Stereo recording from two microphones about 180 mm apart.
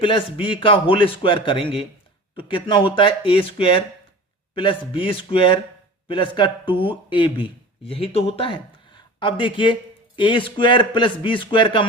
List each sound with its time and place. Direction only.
0.0 s a man's voice: 30° left (ahead or behind)